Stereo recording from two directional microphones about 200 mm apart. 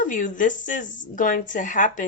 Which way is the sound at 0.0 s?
40° left (ahead or behind).